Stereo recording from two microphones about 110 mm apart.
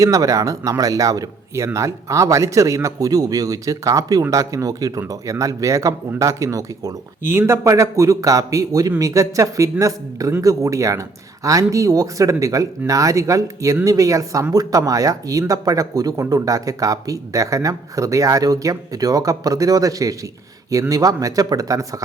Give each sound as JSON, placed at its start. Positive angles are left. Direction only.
{"t": 0.0, "sound": "a man's voice", "side_deg": -30}